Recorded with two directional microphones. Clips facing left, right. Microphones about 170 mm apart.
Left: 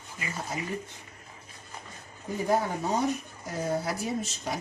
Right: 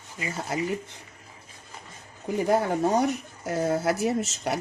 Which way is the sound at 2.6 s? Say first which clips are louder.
Right 5 dB; 70° right (ahead or behind).